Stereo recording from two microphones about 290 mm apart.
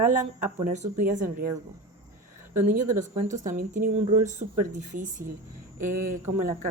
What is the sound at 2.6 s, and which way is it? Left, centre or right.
Speech, right.